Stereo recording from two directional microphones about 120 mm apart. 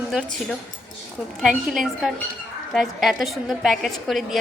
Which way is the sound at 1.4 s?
5° right (ahead or behind).